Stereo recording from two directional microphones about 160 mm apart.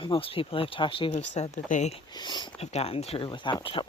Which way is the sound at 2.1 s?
25° left (ahead or behind).